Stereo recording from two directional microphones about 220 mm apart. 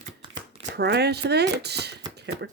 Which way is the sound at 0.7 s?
50° right (ahead or behind).